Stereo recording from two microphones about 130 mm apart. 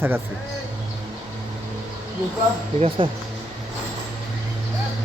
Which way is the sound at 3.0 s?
45° right (ahead or behind).